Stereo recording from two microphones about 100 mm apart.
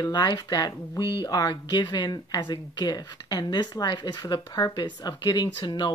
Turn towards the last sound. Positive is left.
turn(degrees=45)  # may be behind; listen again after turning